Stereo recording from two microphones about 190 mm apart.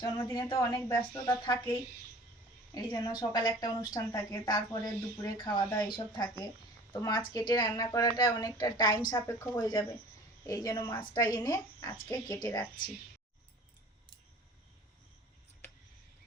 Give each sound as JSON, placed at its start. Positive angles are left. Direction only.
{"t": 0.0, "sound": "a woman's voice", "side_deg": 15}
{"t": 2.7, "sound": "a woman's voice", "side_deg": 20}